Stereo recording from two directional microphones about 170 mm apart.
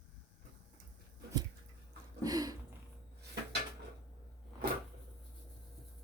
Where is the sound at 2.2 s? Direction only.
20° right (ahead or behind).